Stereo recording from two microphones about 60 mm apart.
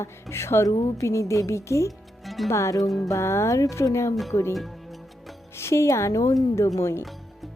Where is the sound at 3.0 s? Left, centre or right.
Left.